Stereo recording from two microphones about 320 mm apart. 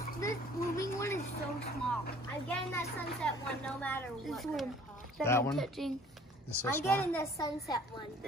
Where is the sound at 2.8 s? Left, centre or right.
Centre.